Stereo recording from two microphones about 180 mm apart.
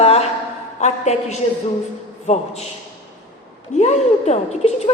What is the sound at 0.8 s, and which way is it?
A woman's voice, 35° left (ahead or behind).